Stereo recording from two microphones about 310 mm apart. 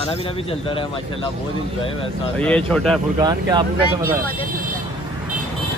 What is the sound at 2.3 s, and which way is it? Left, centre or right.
Speech, centre.